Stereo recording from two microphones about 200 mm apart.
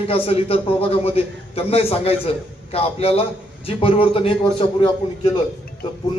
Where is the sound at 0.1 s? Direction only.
30° left (ahead or behind).